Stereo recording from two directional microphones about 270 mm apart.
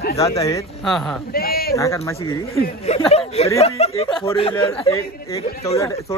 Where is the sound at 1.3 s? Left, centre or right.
Left.